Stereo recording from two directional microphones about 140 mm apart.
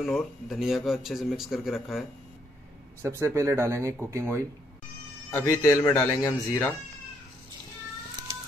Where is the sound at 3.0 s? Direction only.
20° right (ahead or behind).